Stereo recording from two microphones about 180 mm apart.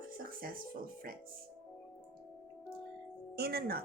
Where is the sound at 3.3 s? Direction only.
60° right (ahead or behind).